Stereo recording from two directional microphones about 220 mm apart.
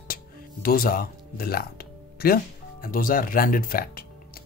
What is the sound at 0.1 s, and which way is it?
Speech, 40° left (ahead or behind).